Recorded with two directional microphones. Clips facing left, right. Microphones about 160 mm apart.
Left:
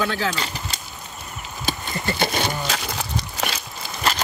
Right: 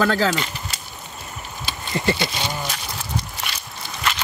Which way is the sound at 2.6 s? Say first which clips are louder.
Left 3 dB; 90° left.